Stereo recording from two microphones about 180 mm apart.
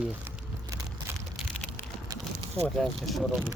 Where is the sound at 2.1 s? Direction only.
20° right (ahead or behind).